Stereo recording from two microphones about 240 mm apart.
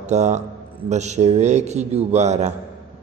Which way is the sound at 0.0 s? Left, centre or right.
Right.